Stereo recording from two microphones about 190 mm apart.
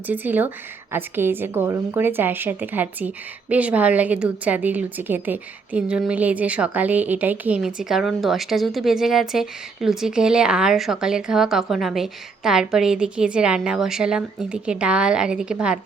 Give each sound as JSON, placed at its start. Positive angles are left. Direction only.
{"t": 0.1, "sound": "a woman's voice", "side_deg": -10}